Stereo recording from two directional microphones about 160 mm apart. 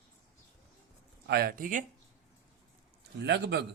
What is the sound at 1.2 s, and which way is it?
Speech, 75° right (ahead or behind).